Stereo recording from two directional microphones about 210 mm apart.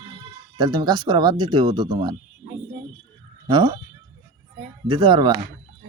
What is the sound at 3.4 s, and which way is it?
Speech, 20° right (ahead or behind).